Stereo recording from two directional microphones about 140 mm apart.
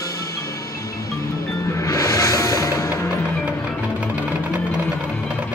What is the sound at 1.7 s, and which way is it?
Music, 25° left (ahead or behind).